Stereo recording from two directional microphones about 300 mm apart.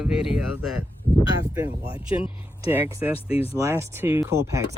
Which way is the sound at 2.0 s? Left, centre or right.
Centre.